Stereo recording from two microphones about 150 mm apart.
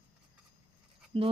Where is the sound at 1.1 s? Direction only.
40° right (ahead or behind).